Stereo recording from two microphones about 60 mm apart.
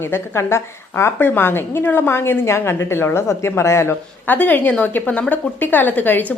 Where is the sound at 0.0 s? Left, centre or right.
Left.